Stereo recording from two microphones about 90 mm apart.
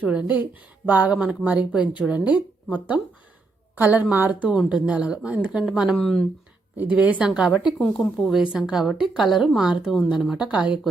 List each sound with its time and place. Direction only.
0.0 s a woman's voice: 15° right (ahead or behind)
6.0 s speech: 5° left (ahead or behind)
6.7 s a woman's voice: 15° right (ahead or behind)
7.8 s speech: 10° left (ahead or behind)
8.3 s a woman's voice: 5° right (ahead or behind)